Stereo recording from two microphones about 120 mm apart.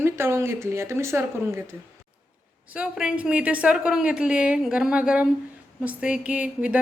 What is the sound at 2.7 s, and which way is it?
A woman's voice, 10° right (ahead or behind).